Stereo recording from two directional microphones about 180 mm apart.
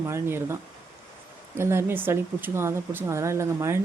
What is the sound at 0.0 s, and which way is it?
Speech, 15° right (ahead or behind).